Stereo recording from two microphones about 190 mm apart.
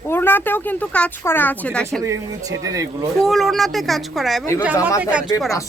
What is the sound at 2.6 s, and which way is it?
Speech, 15° right (ahead or behind).